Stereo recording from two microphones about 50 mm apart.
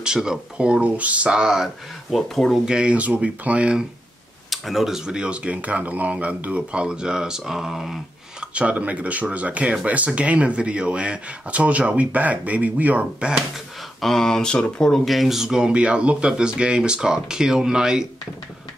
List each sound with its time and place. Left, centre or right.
0.0 s speech: centre
1.3 s speech: centre
2.1 s speech: centre
2.6 s speech: centre
2.9 s speech: right
4.5 s speech: centre
8.4 s speech: right
13.2 s speech: right
14.0 s speech: centre
15.0 s speech: centre